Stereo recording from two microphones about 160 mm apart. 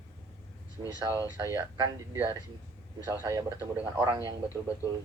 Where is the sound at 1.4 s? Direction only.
20° right (ahead or behind).